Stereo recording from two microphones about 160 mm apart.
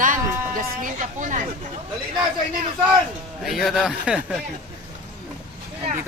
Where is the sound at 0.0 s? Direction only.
55° right (ahead or behind).